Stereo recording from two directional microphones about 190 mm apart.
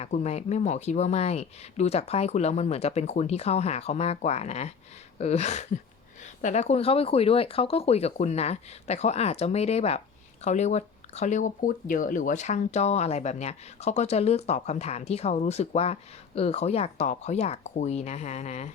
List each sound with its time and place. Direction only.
0.0 s speech: 35° left (ahead or behind)